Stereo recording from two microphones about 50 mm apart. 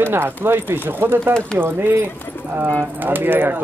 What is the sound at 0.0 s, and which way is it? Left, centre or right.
A man's voice, right.